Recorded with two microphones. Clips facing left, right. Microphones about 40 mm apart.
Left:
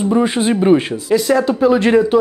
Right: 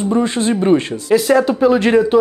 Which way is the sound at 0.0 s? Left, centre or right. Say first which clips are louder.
Left 1 dB; centre.